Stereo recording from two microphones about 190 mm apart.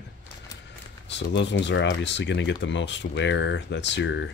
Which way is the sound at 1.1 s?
65° left (ahead or behind).